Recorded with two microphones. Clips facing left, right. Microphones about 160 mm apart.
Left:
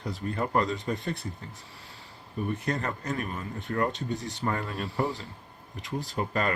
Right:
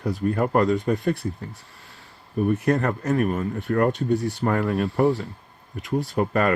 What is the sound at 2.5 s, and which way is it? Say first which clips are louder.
Speech: right 9 dB; 60° right (ahead or behind).